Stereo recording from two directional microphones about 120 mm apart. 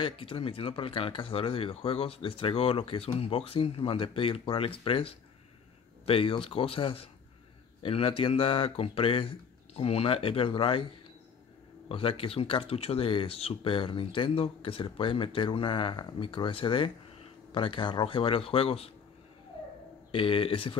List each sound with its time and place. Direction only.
0.0 s speech: 50° left (ahead or behind)
11.9 s speech: 50° left (ahead or behind)
20.1 s speech: 50° left (ahead or behind)